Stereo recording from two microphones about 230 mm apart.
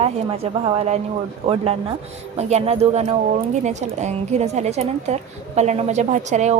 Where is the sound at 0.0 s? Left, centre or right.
Right.